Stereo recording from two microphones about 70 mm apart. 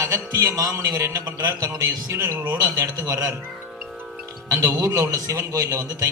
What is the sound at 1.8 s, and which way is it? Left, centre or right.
Speech, right.